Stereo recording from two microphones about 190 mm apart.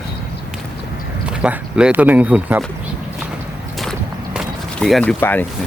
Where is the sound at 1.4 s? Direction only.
5° right (ahead or behind).